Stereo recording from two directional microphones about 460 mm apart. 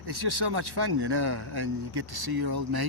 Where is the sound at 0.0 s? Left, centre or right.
Right.